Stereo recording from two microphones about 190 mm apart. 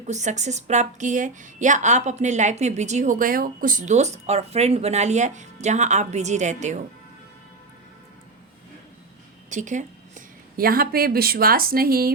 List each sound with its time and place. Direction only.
0.1 s speech: 40° right (ahead or behind)
9.5 s a woman's voice: 40° right (ahead or behind)